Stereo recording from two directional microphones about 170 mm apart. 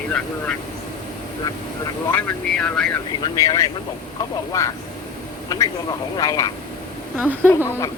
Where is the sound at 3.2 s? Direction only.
20° left (ahead or behind).